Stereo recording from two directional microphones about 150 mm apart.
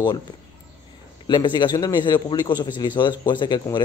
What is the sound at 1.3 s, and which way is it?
A man's voice, 30° left (ahead or behind).